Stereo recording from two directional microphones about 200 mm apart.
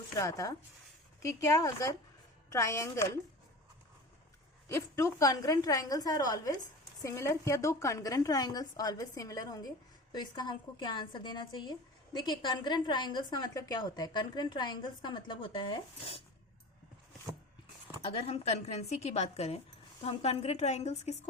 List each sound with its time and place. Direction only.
0.2 s a woman's voice: 15° left (ahead or behind)
4.7 s a woman's voice: 15° left (ahead or behind)
18.0 s speech: 30° left (ahead or behind)